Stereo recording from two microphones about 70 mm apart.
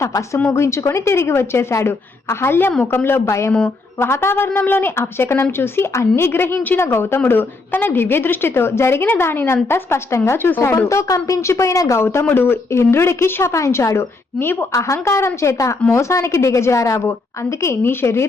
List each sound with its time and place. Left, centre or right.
0.5 s a woman's voice: left
12.3 s a woman's voice: left
14.8 s speech: left
17.6 s a woman's voice: left